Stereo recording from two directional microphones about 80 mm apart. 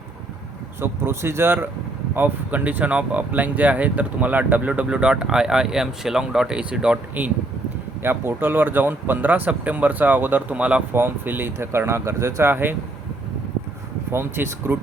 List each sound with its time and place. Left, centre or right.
0.8 s speech: right; by 7.3 s centre
8.0 s speech: right
10.9 s speech: right
14.1 s speech: right